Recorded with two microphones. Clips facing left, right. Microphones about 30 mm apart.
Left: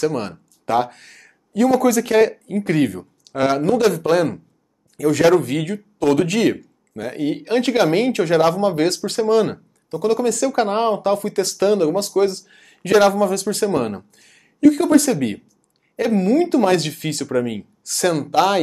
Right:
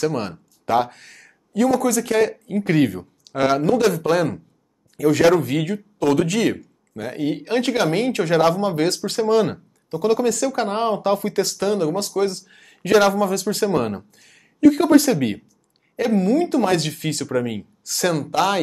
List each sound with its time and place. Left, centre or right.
0.0 s speech: centre
10.5 s speech: centre
11.0 s speech: centre
11.5 s speech: centre